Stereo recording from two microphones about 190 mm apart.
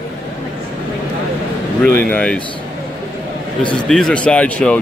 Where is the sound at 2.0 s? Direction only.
5° left (ahead or behind).